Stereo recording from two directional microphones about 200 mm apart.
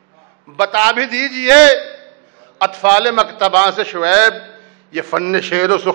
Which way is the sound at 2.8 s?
20° right (ahead or behind).